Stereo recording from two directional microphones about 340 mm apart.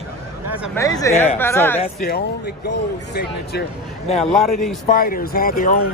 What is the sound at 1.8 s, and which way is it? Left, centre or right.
Speech, left.